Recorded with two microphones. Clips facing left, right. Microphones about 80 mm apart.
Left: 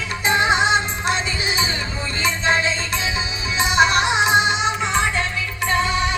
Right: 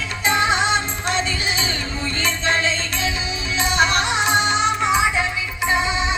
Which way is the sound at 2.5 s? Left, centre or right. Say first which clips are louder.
Left 1 dB; centre.